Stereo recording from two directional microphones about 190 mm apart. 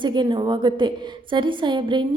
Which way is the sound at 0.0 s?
25° right (ahead or behind).